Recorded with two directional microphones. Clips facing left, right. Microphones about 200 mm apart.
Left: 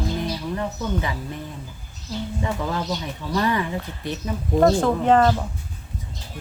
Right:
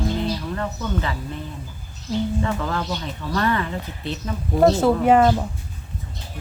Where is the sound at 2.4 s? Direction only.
15° left (ahead or behind).